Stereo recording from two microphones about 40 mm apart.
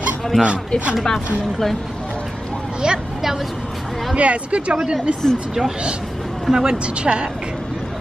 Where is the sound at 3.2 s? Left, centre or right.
Centre.